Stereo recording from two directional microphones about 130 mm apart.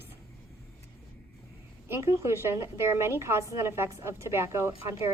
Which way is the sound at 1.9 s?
20° right (ahead or behind).